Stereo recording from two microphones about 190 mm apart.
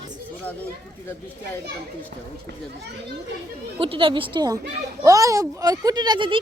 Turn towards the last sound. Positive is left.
turn(degrees=-25)  # may be behind; listen again after turning